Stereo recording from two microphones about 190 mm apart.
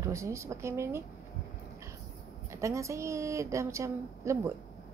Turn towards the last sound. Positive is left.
turn(degrees=-15)  # may be behind; listen again after turning